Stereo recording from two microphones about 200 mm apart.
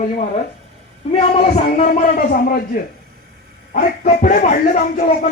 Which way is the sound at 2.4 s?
45° left (ahead or behind).